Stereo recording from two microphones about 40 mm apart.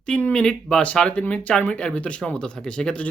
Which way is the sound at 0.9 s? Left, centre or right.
Left.